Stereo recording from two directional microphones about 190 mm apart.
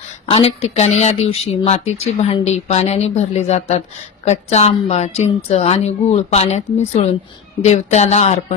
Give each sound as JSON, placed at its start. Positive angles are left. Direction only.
{"t": 0.3, "sound": "a woman's voice", "side_deg": 30}